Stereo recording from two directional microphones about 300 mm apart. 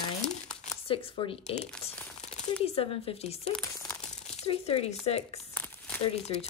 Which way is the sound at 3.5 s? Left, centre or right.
Centre.